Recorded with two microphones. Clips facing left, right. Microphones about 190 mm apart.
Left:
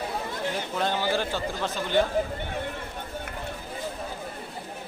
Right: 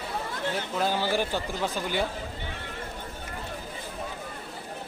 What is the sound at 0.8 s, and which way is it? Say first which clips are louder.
Speech: even; 5° right (ahead or behind).